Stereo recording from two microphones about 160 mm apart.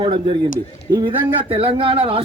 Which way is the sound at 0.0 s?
30° right (ahead or behind).